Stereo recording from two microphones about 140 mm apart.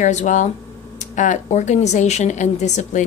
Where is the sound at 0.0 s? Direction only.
60° left (ahead or behind).